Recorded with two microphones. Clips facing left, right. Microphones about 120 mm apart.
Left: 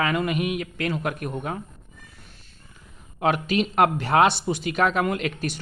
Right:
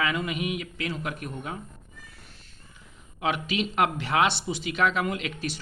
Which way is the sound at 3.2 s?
45° left (ahead or behind).